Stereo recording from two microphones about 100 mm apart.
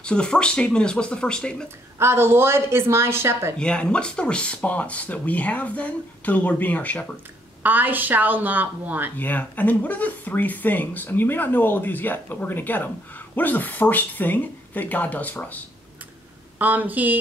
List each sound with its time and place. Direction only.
0.0 s speech: 10° left (ahead or behind)
2.0 s speech: 25° right (ahead or behind)
3.5 s speech: 10° left (ahead or behind)
7.6 s a woman's voice: 20° right (ahead or behind)
9.1 s speech: 20° left (ahead or behind)
16.5 s a woman's voice: 15° right (ahead or behind)